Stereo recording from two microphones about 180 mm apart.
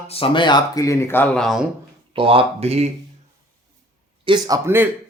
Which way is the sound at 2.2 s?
30° right (ahead or behind).